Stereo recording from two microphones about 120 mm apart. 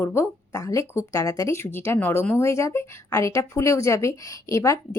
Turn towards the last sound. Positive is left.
turn(degrees=25)  # may be behind; listen again after turning